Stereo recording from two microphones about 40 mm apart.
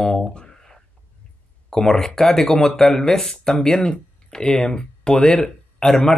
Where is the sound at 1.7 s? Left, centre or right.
Centre.